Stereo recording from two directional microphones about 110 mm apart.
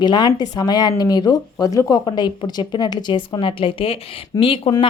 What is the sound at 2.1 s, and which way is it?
A woman's voice, 45° left (ahead or behind).